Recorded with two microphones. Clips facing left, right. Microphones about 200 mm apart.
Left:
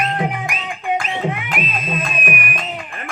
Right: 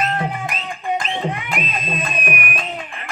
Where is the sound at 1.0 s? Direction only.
5° left (ahead or behind).